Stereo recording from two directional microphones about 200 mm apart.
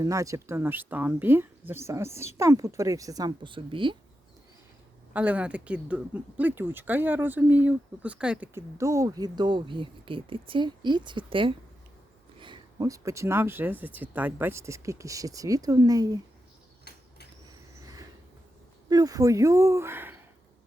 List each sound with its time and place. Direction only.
0.0 s speech: 15° right (ahead or behind)
5.1 s speech: 5° right (ahead or behind)
18.9 s speech: 20° right (ahead or behind)